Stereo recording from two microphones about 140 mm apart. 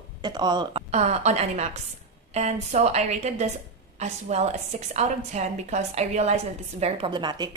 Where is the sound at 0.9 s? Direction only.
55° right (ahead or behind).